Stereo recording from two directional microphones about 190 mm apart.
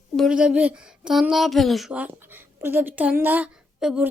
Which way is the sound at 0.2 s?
5° right (ahead or behind).